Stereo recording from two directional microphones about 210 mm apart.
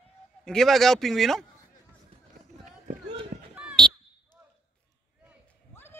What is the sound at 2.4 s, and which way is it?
Run, 35° right (ahead or behind).